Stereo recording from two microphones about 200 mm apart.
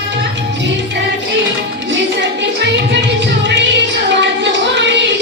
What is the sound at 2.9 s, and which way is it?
Music, 60° right (ahead or behind).